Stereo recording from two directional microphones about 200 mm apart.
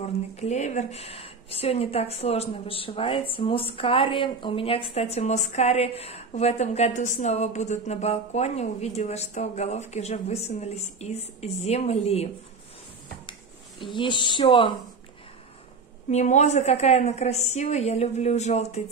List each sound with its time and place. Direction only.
0.0 s a woman's voice: 35° left (ahead or behind)
13.8 s speech: 25° left (ahead or behind)
16.1 s a woman's voice: 35° left (ahead or behind)